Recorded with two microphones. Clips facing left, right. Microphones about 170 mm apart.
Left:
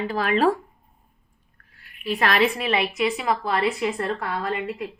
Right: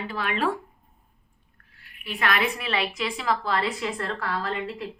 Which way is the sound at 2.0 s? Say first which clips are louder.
Left 4 dB; 40° left (ahead or behind).